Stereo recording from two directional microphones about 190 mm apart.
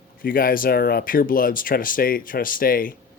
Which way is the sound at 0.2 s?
50° left (ahead or behind).